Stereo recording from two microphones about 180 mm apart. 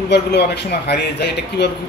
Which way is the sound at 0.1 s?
70° left (ahead or behind).